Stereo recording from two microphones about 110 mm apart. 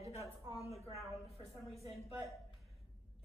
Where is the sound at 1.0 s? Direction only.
Centre (ahead or behind).